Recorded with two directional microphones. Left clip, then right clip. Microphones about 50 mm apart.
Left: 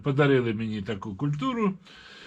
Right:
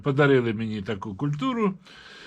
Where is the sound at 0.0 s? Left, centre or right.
Right.